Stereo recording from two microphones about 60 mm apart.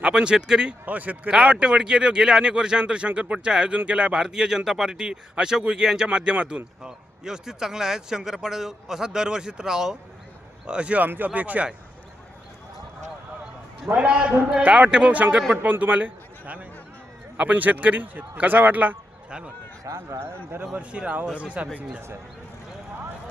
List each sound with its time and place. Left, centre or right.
0.1 s speech: centre
0.9 s speech: right
13.9 s a man's voice: centre
19.8 s speech: right
20.1 s a man's voice: right
20.7 s speech: right